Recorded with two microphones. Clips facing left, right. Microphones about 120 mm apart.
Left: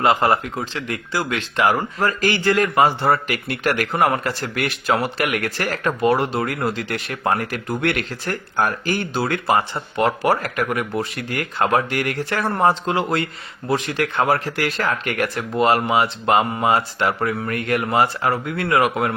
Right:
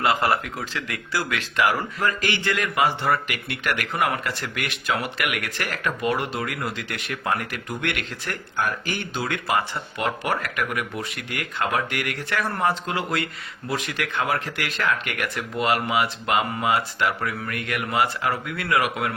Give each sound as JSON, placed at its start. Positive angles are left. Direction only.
{"t": 0.0, "sound": "speech", "side_deg": 30}